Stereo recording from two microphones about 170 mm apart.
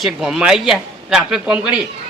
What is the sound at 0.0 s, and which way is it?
A man's voice, centre (ahead or behind).